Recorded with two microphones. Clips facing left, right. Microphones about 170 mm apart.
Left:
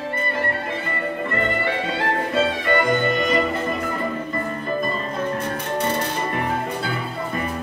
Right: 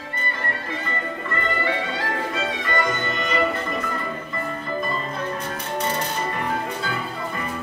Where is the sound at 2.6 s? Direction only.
50° left (ahead or behind).